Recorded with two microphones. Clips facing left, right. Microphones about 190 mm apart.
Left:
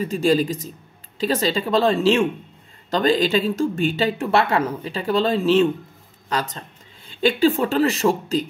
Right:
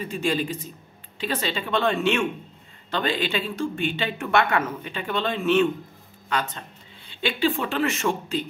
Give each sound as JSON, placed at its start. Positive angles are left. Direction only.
{"t": 0.0, "sound": "speech", "side_deg": 40}